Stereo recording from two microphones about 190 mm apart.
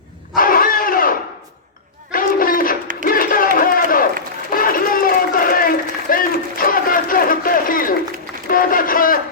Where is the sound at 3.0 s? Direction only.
50° left (ahead or behind).